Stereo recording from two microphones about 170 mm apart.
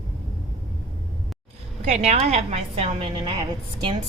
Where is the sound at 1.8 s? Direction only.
40° right (ahead or behind).